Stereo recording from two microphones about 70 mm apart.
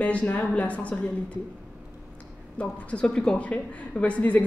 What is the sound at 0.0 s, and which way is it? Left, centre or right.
Speech, centre.